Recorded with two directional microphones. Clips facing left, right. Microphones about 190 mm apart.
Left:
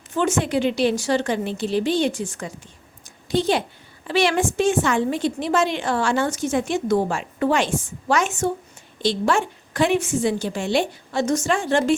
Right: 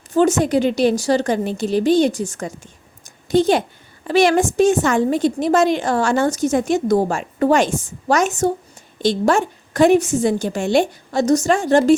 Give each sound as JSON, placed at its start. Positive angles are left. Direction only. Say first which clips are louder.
{"t": 0.1, "sound": "a woman's voice", "louder": "right 6 dB", "side_deg": -40}
{"t": 3.0, "sound": "a sound", "louder": "right 6 dB", "side_deg": -45}
{"t": 4.0, "sound": "a woman's voice", "louder": "right 5 dB", "side_deg": -45}